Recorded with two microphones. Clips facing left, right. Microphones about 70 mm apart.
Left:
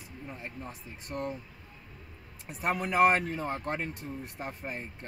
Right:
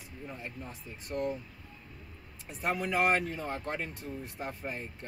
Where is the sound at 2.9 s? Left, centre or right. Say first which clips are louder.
Left 5 dB; left.